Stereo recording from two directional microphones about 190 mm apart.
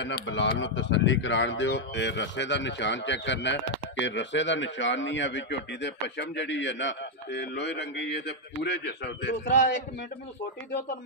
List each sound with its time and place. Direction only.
0.0 s speech: 70° left (ahead or behind)